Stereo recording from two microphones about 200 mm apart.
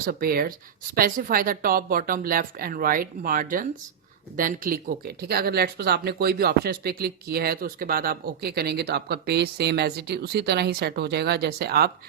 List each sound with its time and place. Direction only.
0.0 s speech: 50° right (ahead or behind)